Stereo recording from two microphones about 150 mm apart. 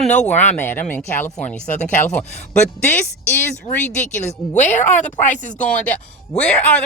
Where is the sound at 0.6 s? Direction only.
10° left (ahead or behind).